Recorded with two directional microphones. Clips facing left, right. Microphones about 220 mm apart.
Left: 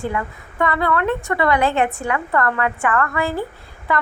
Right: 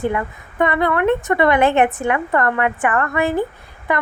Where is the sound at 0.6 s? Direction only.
20° right (ahead or behind).